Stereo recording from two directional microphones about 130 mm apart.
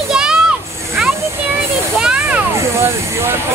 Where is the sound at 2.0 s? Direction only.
5° right (ahead or behind).